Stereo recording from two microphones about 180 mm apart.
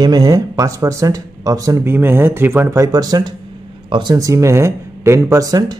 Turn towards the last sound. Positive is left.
turn(degrees=-20)  # may be behind; listen again after turning